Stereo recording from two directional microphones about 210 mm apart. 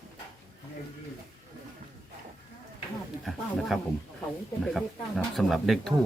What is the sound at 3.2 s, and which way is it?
Speech, centre (ahead or behind).